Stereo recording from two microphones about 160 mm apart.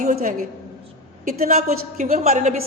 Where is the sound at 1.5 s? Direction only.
45° right (ahead or behind).